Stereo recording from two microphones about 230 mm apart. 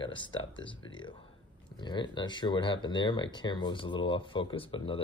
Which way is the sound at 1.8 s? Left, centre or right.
Centre.